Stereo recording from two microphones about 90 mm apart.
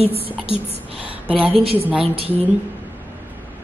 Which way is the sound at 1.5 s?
90° right.